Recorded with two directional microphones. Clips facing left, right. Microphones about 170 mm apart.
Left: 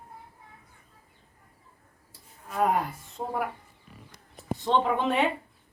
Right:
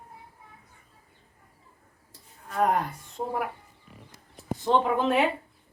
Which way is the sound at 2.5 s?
5° left (ahead or behind).